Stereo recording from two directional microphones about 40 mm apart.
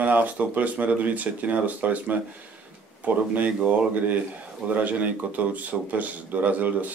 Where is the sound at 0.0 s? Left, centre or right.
Right.